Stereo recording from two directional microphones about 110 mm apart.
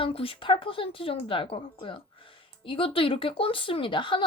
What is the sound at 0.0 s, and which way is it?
Speech, 55° left (ahead or behind).